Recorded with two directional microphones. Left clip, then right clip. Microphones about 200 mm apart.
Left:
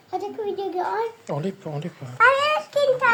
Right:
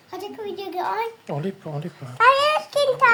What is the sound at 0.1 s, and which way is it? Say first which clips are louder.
Speech: left 4 dB; 55° right (ahead or behind).